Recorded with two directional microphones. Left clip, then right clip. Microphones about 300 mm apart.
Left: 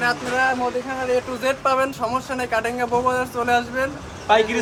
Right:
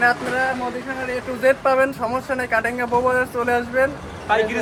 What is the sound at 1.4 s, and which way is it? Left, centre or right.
Speech, centre.